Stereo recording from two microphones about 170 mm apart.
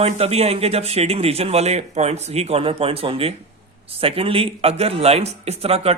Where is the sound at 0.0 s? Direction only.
40° right (ahead or behind).